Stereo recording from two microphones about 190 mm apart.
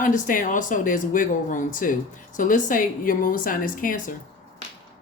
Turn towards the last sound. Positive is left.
turn(degrees=45)  # may be behind; listen again after turning